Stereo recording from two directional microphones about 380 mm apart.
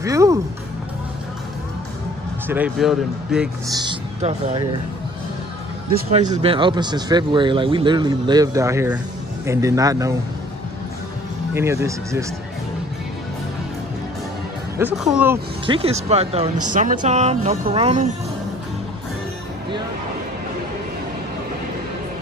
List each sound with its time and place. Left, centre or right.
0.0 s speech: centre
2.4 s speech: centre
5.9 s speech: centre
11.5 s speech: centre
14.8 s speech: centre